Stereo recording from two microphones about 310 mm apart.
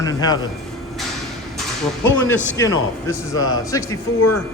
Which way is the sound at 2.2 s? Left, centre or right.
Centre.